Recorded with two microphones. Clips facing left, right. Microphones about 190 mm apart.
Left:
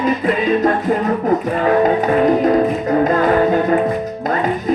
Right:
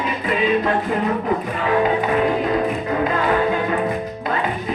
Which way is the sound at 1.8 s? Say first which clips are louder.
Left 5 dB; 45° left (ahead or behind).